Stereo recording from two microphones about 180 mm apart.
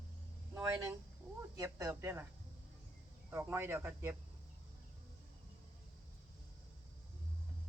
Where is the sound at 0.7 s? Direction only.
15° right (ahead or behind).